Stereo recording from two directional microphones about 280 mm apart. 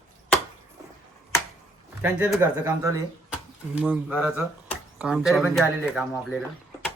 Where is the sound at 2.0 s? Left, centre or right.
Centre.